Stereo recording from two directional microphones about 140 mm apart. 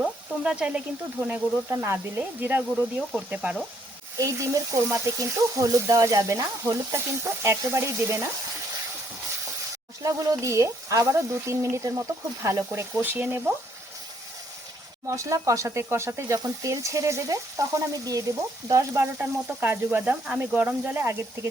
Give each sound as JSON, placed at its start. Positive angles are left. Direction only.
{"t": 0.0, "sound": "frying", "side_deg": -5}
{"t": 1.7, "sound": "speech", "side_deg": -15}
{"t": 4.2, "sound": "speech", "side_deg": -20}
{"t": 10.0, "sound": "speech", "side_deg": -25}
{"t": 15.0, "sound": "speech", "side_deg": -20}